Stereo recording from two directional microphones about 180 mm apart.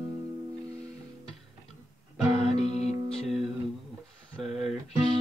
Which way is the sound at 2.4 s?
35° left (ahead or behind).